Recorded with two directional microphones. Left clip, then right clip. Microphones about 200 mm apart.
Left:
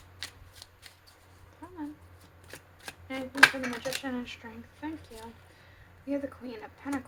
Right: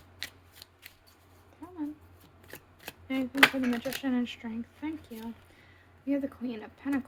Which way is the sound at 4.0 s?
35° right (ahead or behind).